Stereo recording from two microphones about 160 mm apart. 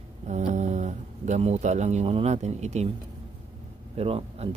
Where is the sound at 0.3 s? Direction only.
45° right (ahead or behind).